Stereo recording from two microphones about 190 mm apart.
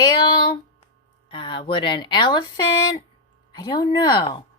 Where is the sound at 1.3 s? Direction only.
25° left (ahead or behind).